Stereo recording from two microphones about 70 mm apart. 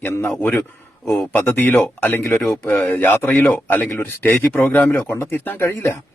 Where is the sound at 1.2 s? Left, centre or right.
Left.